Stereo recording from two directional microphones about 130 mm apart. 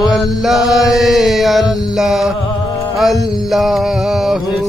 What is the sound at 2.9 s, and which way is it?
Music, centre (ahead or behind).